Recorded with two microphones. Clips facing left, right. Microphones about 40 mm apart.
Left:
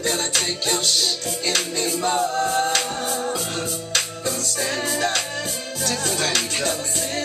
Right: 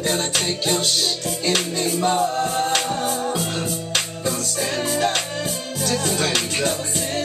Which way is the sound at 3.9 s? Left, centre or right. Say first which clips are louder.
Even; centre.